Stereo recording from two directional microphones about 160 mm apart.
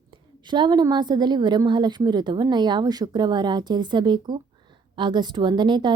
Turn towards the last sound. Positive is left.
turn(degrees=-30)  # may be behind; listen again after turning